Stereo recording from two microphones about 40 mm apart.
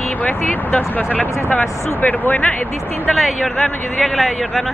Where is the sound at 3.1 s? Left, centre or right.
Centre.